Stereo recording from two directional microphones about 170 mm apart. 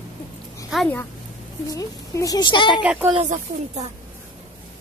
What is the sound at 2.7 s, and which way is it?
Speech, 5° right (ahead or behind).